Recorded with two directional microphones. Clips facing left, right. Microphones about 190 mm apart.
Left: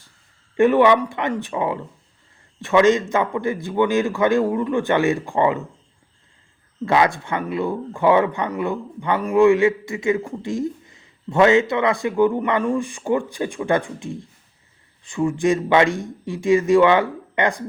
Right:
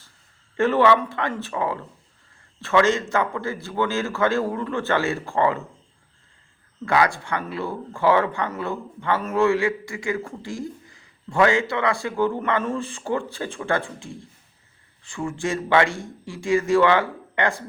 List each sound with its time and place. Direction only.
0.5 s a man's voice: 15° left (ahead or behind)
6.8 s speech: 20° left (ahead or behind)